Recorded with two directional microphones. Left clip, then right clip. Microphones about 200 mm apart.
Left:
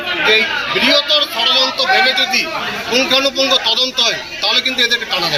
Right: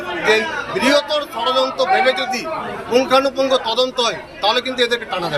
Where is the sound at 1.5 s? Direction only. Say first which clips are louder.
Left 1 dB; 15° right (ahead or behind).